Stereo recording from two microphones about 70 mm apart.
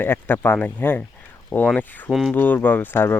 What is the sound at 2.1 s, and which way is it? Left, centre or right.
Speech, centre.